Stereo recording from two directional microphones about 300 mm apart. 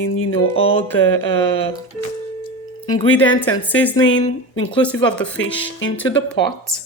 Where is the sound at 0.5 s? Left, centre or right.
Centre.